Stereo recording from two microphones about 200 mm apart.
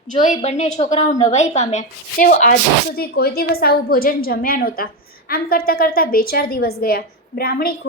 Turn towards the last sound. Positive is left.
turn(degrees=50)  # may be behind; listen again after turning